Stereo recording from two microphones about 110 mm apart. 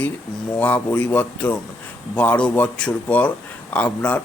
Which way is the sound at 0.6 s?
15° left (ahead or behind).